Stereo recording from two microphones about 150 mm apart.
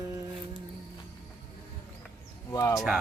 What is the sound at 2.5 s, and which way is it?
Speech, 20° left (ahead or behind).